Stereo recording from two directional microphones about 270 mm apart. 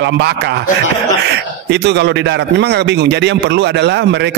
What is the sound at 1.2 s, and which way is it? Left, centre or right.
A man's voice, right.